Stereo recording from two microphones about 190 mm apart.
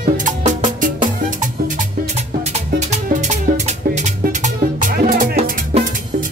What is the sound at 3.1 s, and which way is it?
Music, 40° right (ahead or behind).